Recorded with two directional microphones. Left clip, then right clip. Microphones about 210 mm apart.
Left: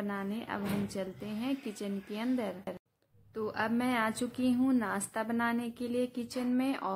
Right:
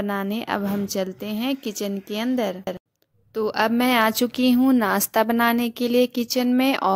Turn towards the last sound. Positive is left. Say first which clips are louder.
# right 13 dB
turn(degrees=-45)  # may be behind; listen again after turning